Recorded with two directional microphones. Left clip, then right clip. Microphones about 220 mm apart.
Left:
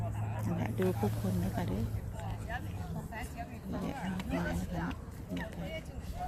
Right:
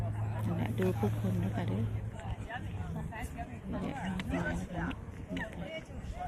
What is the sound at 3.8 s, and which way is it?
Speech, 50° left (ahead or behind).